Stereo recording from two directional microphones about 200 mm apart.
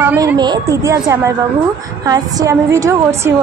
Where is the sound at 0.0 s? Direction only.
10° right (ahead or behind).